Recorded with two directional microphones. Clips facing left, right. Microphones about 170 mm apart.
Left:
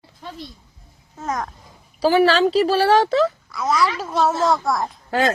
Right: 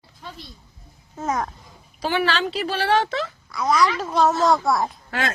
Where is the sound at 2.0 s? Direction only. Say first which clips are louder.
Left 8 dB; 40° left (ahead or behind).